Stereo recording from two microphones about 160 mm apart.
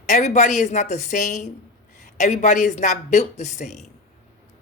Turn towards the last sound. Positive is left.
turn(degrees=45)  # may be behind; listen again after turning